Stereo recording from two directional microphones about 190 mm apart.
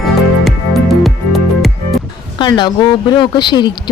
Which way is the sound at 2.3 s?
25° left (ahead or behind).